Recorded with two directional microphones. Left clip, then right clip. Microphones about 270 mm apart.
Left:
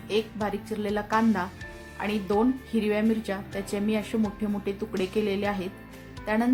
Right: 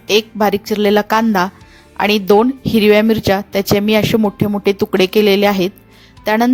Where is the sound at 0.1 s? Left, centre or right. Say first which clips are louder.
Right 15 dB; right.